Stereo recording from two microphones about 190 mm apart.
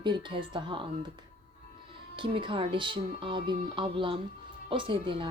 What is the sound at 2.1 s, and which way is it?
Speech, 25° right (ahead or behind).